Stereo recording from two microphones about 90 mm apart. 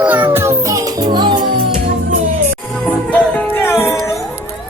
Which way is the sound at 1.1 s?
55° right (ahead or behind).